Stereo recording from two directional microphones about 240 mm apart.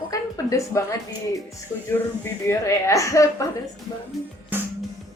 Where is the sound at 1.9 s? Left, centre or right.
Centre.